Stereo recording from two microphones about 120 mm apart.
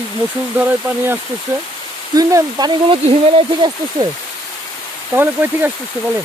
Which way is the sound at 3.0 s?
55° right (ahead or behind).